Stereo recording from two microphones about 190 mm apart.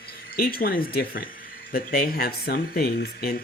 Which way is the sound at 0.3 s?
50° left (ahead or behind).